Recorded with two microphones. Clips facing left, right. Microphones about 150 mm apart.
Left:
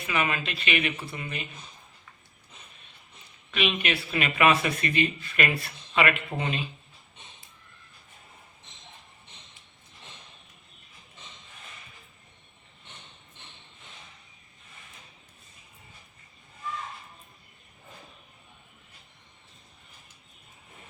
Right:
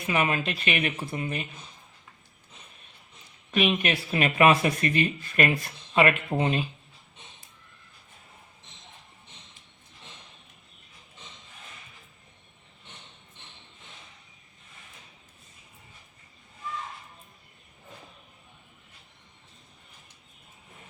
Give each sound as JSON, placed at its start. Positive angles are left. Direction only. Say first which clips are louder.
{"t": 0.1, "sound": "speech", "louder": "right 3 dB", "side_deg": -40}
{"t": 3.5, "sound": "speech", "louder": "right 3 dB", "side_deg": -45}